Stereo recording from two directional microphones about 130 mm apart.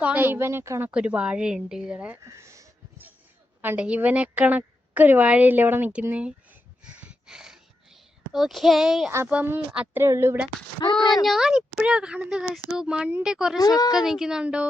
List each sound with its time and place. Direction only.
0.0 s speech: 10° right (ahead or behind)
0.9 s speech: 10° right (ahead or behind)
2.2 s a sound: 20° right (ahead or behind)
3.6 s a woman's voice: 15° right (ahead or behind)
9.0 s speech: 15° right (ahead or behind)
11.2 s speech: centre (ahead or behind)
13.6 s speech: 30° left (ahead or behind)
14.0 s speech: 5° right (ahead or behind)